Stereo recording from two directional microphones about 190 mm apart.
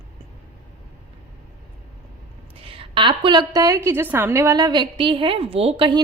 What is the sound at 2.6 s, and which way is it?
A woman's voice, 30° right (ahead or behind).